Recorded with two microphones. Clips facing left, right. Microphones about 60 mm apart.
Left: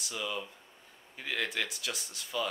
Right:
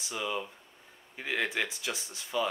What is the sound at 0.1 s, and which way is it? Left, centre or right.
Speech, centre.